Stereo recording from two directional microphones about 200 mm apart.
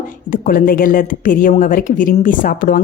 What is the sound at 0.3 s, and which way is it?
A woman's voice, 45° left (ahead or behind).